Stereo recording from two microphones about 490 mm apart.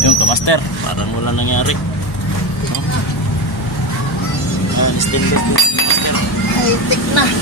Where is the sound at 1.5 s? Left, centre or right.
Left.